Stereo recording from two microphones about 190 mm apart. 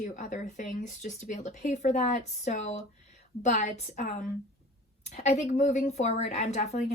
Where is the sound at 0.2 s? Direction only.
40° left (ahead or behind).